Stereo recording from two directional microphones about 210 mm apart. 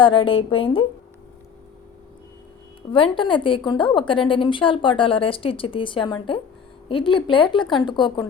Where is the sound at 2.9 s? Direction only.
25° left (ahead or behind).